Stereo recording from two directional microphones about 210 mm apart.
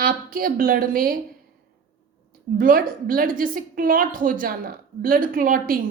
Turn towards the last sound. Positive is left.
turn(degrees=-40)  # may be behind; listen again after turning